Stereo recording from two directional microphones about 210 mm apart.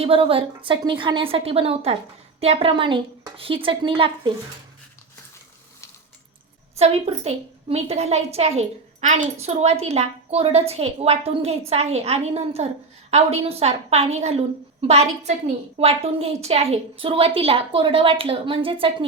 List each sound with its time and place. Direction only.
0.0 s a woman's voice: 25° right (ahead or behind)
6.7 s a woman's voice: 30° right (ahead or behind)